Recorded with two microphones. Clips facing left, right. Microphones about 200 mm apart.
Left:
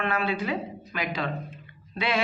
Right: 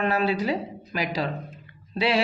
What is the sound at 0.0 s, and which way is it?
Speech, 40° right (ahead or behind).